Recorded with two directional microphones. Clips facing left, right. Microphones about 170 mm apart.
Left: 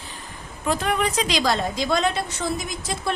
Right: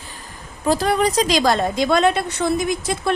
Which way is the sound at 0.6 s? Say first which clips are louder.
Right 5 dB; 35° right (ahead or behind).